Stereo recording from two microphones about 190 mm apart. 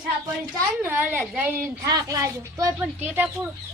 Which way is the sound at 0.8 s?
10° right (ahead or behind).